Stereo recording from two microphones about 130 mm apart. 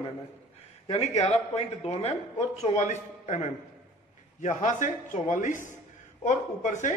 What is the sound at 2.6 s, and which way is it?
Speech, 65° left (ahead or behind).